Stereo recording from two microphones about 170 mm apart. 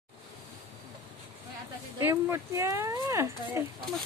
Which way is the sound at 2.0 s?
15° right (ahead or behind).